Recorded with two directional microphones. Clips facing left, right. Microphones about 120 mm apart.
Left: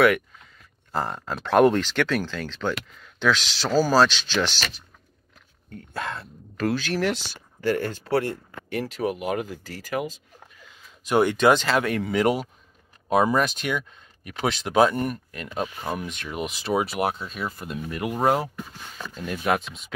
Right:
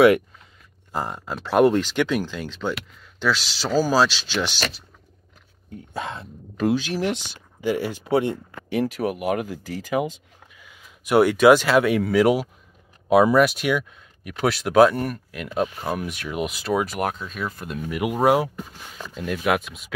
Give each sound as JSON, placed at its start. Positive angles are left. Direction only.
{"t": 0.9, "sound": "speech", "side_deg": -10}
{"t": 5.7, "sound": "speech", "side_deg": -15}
{"t": 11.1, "sound": "speech", "side_deg": -5}
{"t": 17.8, "sound": "speech", "side_deg": -10}